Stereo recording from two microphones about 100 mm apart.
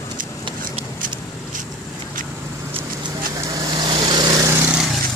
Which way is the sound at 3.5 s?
45° right (ahead or behind).